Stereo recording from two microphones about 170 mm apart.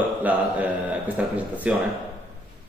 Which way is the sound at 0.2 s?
10° right (ahead or behind).